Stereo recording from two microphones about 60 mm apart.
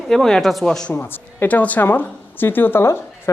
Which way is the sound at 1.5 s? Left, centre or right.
Left.